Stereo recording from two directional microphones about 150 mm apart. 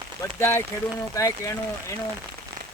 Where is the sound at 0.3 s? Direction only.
15° left (ahead or behind).